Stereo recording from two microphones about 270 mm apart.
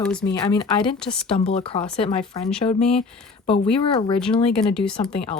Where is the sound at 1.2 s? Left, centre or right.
Left.